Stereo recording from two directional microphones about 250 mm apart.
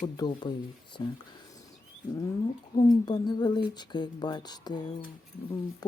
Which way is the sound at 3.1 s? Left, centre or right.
Centre.